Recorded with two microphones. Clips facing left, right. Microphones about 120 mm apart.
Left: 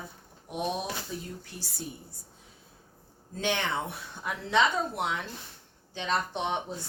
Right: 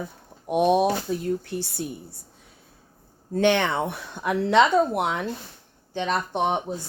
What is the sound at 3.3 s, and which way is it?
Speech, 65° right (ahead or behind).